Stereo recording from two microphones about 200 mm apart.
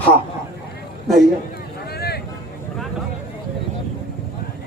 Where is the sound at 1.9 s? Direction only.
50° left (ahead or behind).